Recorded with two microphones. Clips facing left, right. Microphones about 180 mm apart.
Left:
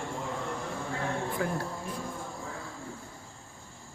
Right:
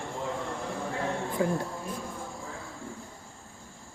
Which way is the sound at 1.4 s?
25° right (ahead or behind).